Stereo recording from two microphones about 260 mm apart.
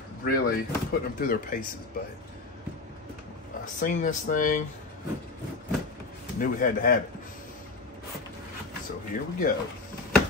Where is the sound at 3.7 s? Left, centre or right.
Left.